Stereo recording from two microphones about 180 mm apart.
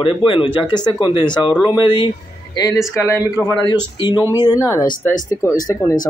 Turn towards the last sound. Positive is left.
turn(degrees=20)  # may be behind; listen again after turning